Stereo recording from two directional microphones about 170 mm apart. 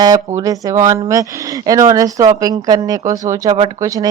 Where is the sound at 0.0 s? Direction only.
20° right (ahead or behind).